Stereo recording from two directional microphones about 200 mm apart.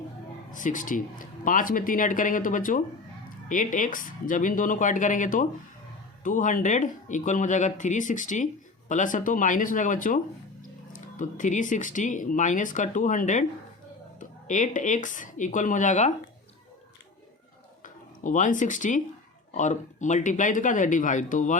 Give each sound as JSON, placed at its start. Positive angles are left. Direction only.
{"t": 0.5, "sound": "speech", "side_deg": 40}
{"t": 17.8, "sound": "speech", "side_deg": 40}